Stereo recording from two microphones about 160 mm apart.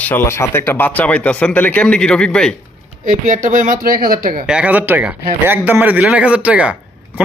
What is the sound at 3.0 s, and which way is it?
Speech, 55° right (ahead or behind).